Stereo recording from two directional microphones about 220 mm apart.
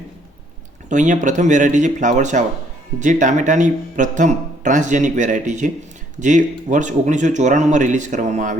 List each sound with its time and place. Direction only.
0.9 s a man's voice: 35° right (ahead or behind)